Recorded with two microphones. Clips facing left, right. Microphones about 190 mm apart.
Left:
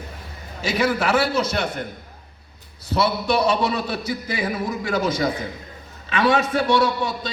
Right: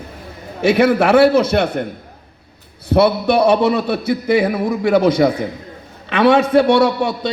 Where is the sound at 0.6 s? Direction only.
60° right (ahead or behind).